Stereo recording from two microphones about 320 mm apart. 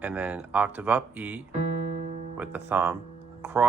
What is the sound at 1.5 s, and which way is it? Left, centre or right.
Music, right.